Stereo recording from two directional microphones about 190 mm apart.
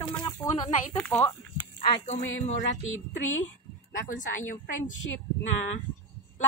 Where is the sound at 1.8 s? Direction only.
30° left (ahead or behind).